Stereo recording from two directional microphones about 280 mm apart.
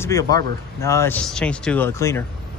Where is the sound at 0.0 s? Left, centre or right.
Centre.